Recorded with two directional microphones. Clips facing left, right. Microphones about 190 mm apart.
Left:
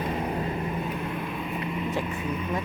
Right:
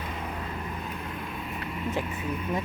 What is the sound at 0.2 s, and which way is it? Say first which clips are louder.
Vehicle: left 7 dB; 35° left (ahead or behind).